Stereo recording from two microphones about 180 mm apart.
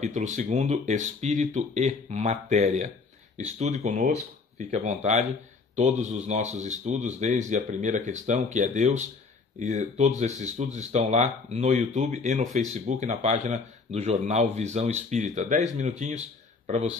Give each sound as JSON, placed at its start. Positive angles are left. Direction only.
{"t": 0.0, "sound": "speech", "side_deg": -40}